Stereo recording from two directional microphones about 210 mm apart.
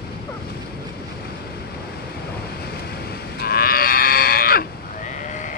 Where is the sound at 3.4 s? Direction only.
45° left (ahead or behind).